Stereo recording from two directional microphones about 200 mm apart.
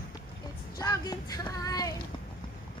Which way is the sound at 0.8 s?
20° left (ahead or behind).